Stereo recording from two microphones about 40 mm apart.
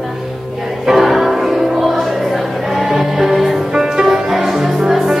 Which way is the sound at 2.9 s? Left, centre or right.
Centre.